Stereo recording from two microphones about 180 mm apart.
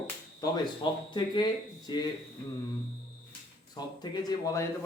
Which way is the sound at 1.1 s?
25° left (ahead or behind).